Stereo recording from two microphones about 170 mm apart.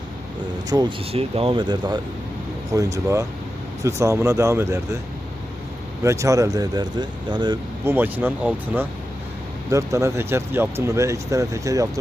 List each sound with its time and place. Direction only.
0.7 s speech: 25° right (ahead or behind)
1.1 s speech: 35° right (ahead or behind); by 4.9 s 15° right (ahead or behind)
6.0 s speech: 15° right (ahead or behind)
7.9 s speech: 10° right (ahead or behind)